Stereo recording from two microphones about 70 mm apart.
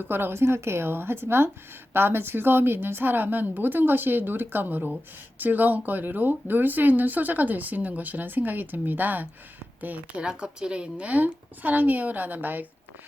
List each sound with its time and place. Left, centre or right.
0.0 s speech: right
10.2 s speech: centre; by 12.6 s right